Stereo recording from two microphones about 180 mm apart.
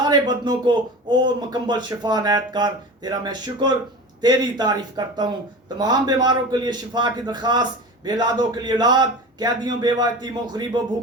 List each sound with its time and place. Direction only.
0.0 s speech: 25° right (ahead or behind)